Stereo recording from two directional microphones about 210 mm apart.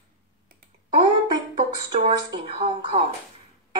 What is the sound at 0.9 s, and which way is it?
Speech, 20° right (ahead or behind).